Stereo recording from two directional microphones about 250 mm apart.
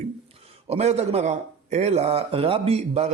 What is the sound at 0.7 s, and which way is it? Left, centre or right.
Speech, right.